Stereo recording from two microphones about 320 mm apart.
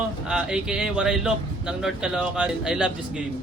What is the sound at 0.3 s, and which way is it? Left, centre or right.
Speech, centre.